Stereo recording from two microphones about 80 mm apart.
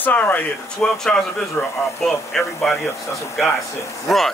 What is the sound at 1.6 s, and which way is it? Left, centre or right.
Speech, left.